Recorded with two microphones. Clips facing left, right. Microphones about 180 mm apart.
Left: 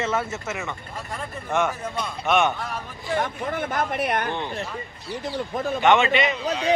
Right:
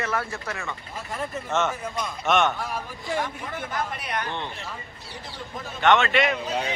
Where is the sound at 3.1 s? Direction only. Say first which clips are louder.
Left 4 dB; 55° left (ahead or behind).